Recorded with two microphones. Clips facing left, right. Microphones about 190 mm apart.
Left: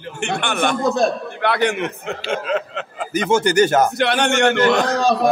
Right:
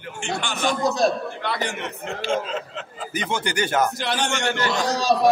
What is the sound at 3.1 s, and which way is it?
Speech, 45° left (ahead or behind).